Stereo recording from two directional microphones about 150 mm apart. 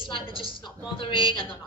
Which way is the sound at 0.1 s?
35° left (ahead or behind).